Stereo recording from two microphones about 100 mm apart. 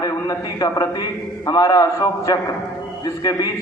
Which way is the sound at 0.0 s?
35° left (ahead or behind).